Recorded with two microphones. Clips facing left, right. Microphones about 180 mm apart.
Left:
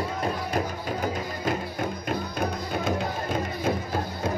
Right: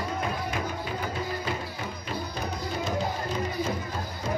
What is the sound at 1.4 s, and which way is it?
Music, 50° left (ahead or behind).